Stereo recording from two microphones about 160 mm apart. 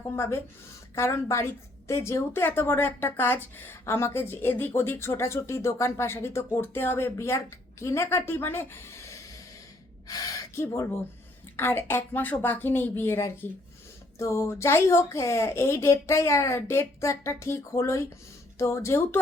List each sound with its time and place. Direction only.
0.2 s speech: 15° left (ahead or behind)